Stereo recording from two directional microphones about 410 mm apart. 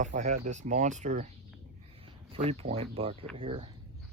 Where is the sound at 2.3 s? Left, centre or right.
Centre.